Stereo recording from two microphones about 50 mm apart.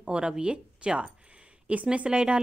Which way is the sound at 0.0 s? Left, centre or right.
Centre.